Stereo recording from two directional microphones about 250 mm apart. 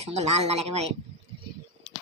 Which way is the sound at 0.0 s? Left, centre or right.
Right.